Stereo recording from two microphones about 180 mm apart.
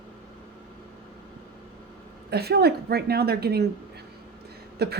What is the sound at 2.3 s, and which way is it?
A woman's voice, 60° right (ahead or behind).